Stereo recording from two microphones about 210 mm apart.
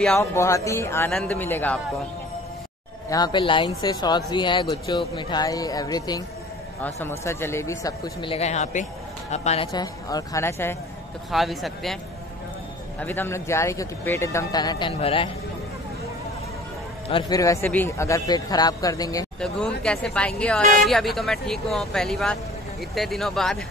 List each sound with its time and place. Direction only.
0.2 s speech: 10° left (ahead or behind)
3.1 s speech: 20° left (ahead or behind)
9.7 s speech: 20° left (ahead or behind)
11.3 s speech: centre (ahead or behind)
13.0 s speech: 10° left (ahead or behind); by 15.2 s 25° left (ahead or behind)
17.1 s speech: 15° left (ahead or behind)
19.4 s speech: 5° left (ahead or behind)